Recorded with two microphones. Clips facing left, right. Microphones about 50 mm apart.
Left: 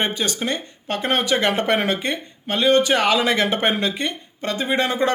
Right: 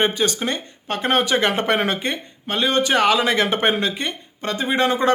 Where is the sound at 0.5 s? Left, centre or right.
Right.